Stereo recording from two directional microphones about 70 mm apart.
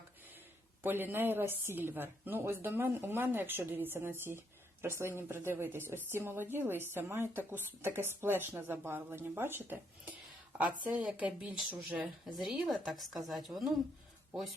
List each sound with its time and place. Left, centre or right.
0.8 s speech: right
10.6 s speech: centre
12.4 s a woman's voice: centre